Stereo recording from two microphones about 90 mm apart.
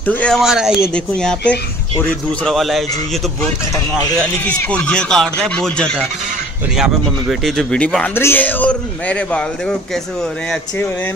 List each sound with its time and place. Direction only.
0.0 s speech: 20° left (ahead or behind)
0.3 s speech: 5° right (ahead or behind)
0.9 s speech: 10° left (ahead or behind)
2.4 s speech: centre (ahead or behind)
4.5 s speech: 15° left (ahead or behind)
6.8 s speech: centre (ahead or behind)
8.1 s speech: 25° left (ahead or behind)